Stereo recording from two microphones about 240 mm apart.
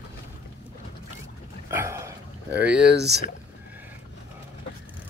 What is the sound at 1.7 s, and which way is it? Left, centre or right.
Dog, centre.